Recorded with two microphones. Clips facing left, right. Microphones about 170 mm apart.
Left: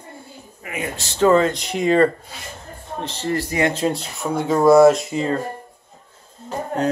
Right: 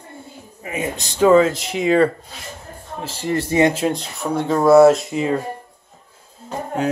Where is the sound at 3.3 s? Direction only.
25° right (ahead or behind).